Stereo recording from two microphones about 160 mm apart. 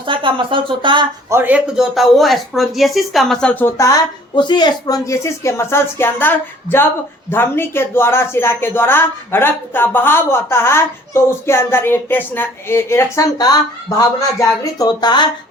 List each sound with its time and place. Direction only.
0.1 s speech: 30° right (ahead or behind)
1.3 s speech: 10° right (ahead or behind); by 15.3 s 25° left (ahead or behind)